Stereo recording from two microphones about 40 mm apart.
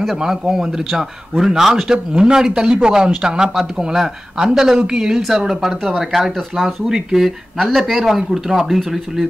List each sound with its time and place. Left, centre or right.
0.1 s speech: centre
6.9 s speech: centre